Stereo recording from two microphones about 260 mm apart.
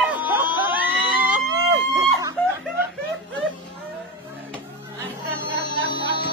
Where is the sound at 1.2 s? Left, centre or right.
Centre.